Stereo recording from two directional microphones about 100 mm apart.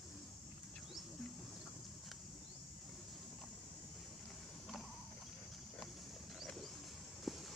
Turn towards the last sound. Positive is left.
turn(degrees=0)  # may be behind; listen again after turning